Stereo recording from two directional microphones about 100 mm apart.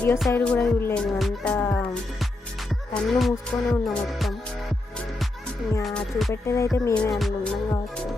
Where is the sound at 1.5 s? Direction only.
20° left (ahead or behind).